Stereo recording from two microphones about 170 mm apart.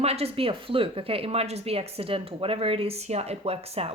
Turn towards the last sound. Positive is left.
turn(degrees=-35)  # may be behind; listen again after turning